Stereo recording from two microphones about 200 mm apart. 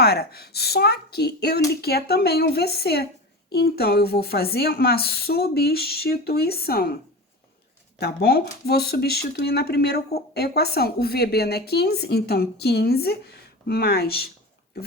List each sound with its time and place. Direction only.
0.0 s speech: 50° left (ahead or behind)